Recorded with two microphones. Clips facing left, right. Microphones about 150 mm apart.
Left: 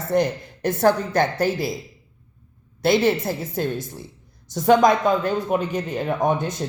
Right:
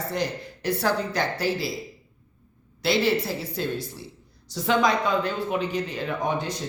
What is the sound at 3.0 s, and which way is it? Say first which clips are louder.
Speech: left 3 dB; 50° left (ahead or behind).